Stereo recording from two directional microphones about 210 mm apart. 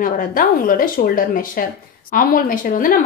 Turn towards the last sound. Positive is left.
turn(degrees=40)  # may be behind; listen again after turning